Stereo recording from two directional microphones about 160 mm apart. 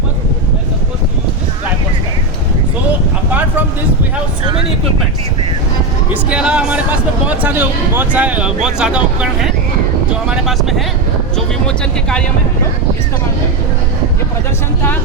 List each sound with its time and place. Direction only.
6.3 s speech: 5° right (ahead or behind)